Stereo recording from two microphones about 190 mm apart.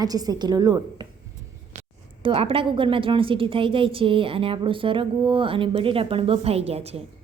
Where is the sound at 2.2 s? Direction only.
30° right (ahead or behind).